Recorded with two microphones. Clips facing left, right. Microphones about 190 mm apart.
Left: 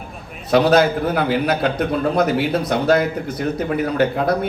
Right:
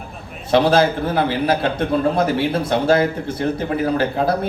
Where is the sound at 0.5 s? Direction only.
30° right (ahead or behind).